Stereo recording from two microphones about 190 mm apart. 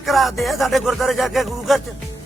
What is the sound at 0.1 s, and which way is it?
Speech, centre (ahead or behind).